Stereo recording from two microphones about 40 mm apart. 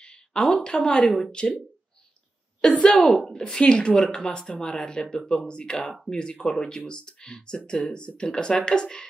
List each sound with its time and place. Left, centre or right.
0.0 s a sound: centre
0.7 s speech: left
2.6 s speech: centre
3.1 s a woman's voice: centre
3.3 s speech: centre